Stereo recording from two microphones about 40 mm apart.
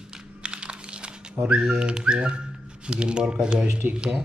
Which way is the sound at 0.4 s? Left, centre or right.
Right.